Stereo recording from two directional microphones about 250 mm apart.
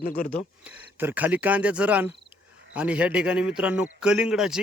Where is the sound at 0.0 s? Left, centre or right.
Left.